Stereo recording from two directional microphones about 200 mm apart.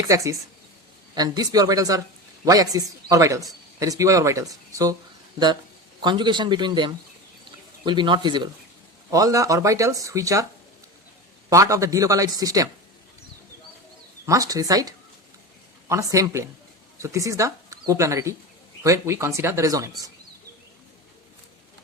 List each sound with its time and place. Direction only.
0.1 s a man's voice: 15° right (ahead or behind)
6.0 s a man's voice: 20° right (ahead or behind)
11.4 s a man's voice: 15° right (ahead or behind)
14.3 s a man's voice: 15° right (ahead or behind)